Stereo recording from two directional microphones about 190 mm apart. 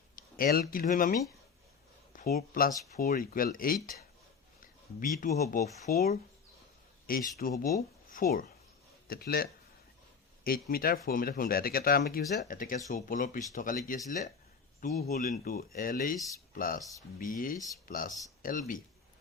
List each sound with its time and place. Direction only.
0.2 s speech: 50° left (ahead or behind)
5.9 s speech: 55° left (ahead or behind)
16.1 s speech: 15° left (ahead or behind)
16.6 s speech: 45° left (ahead or behind)